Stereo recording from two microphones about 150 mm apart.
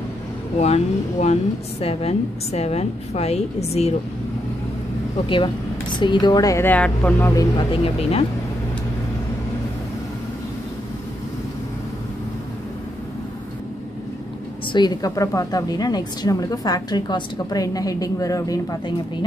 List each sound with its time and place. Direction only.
0.6 s a woman's voice: 45° left (ahead or behind)
5.1 s a woman's voice: 35° left (ahead or behind); by 7.4 s 15° left (ahead or behind)
7.5 s speech: 35° left (ahead or behind)
14.7 s a woman's voice: 30° left (ahead or behind)